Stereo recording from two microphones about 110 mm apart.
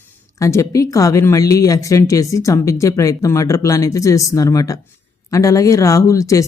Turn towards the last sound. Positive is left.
turn(degrees=30)  # may be behind; listen again after turning